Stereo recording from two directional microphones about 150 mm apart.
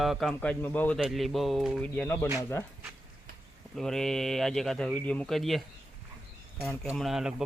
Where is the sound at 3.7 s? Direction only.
5° left (ahead or behind).